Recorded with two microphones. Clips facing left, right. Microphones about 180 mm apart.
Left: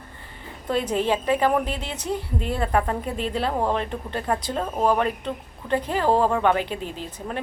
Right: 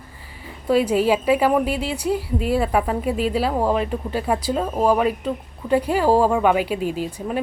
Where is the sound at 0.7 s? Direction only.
5° right (ahead or behind).